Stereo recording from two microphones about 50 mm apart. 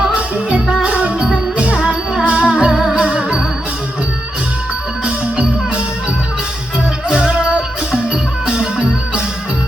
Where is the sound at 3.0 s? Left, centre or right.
Right.